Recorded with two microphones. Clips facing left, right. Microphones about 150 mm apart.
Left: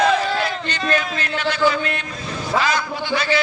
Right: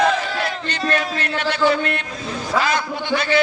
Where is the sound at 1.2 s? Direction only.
60° right (ahead or behind).